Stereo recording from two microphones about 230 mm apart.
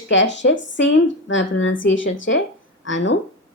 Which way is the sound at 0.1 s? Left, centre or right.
Left.